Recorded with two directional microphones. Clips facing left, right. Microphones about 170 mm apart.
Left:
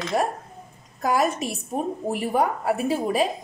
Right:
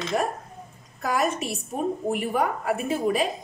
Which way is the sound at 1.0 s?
35° left (ahead or behind).